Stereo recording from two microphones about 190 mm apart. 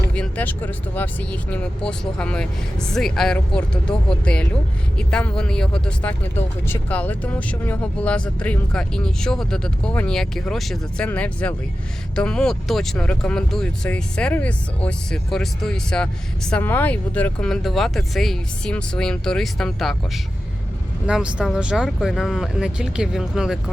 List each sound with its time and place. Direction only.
0.1 s speech: 5° left (ahead or behind)